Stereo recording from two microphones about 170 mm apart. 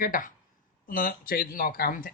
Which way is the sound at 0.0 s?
55° left (ahead or behind).